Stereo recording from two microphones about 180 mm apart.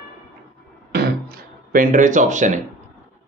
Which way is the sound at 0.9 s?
55° right (ahead or behind).